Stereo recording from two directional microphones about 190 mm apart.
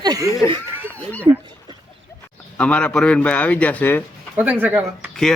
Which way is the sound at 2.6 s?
5° left (ahead or behind).